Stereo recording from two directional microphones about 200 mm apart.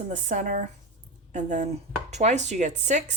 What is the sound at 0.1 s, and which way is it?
Speech, 40° right (ahead or behind).